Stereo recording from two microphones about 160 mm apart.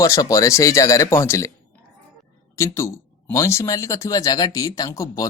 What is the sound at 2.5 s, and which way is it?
Speech, 15° left (ahead or behind).